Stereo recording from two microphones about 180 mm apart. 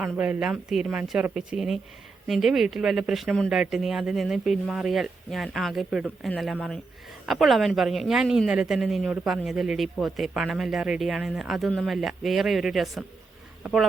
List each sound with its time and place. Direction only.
0.0 s a woman's voice: 10° right (ahead or behind)